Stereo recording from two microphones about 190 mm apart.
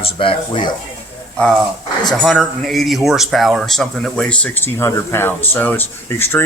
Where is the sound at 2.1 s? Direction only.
Centre (ahead or behind).